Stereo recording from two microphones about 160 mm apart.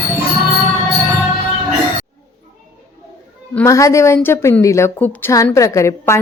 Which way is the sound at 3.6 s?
20° left (ahead or behind).